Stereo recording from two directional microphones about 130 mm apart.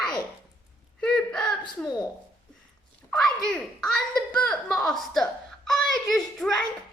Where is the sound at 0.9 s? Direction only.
5° left (ahead or behind).